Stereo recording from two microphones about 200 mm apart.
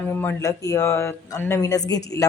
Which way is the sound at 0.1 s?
10° left (ahead or behind).